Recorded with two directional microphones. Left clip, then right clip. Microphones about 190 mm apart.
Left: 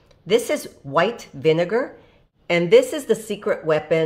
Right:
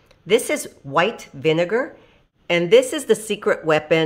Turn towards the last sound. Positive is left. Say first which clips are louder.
# right 2 dB
turn(degrees=-15)  # may be behind; listen again after turning